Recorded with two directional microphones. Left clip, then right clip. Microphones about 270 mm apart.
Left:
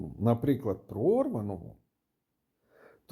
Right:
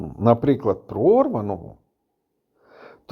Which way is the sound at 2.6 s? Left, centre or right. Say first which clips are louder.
Right 12 dB; centre.